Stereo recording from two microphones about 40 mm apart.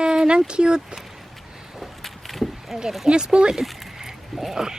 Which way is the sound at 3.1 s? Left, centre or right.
Centre.